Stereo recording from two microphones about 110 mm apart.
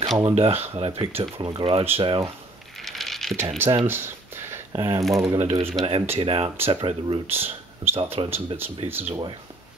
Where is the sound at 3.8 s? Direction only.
20° right (ahead or behind).